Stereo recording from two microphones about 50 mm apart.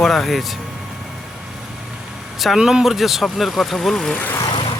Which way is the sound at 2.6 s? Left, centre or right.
Centre.